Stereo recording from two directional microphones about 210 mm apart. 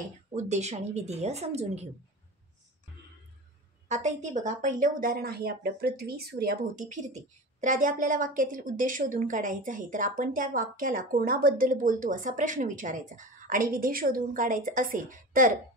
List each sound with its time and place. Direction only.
0.4 s a woman's voice: 30° right (ahead or behind)
3.9 s a woman's voice: 35° right (ahead or behind)